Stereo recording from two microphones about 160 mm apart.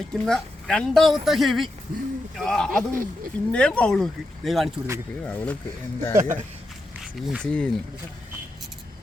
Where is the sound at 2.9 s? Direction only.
60° right (ahead or behind).